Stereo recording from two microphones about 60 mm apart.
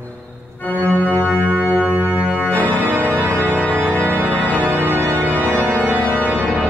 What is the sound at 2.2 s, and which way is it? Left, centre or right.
Organ, right.